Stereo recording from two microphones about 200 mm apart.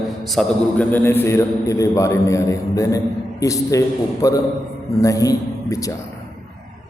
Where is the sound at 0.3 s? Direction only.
5° left (ahead or behind).